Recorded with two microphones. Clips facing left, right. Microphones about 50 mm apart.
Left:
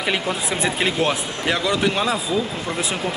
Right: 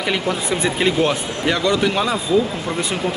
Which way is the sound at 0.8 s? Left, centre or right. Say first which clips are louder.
Right 3 dB; centre.